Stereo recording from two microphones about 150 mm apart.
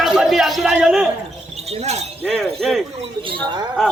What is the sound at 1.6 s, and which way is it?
Speech, 45° right (ahead or behind).